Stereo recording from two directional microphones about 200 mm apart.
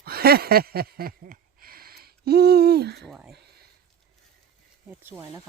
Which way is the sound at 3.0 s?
Centre (ahead or behind).